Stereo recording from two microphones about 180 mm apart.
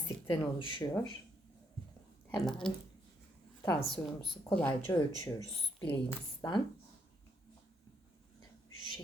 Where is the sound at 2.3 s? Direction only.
5° left (ahead or behind).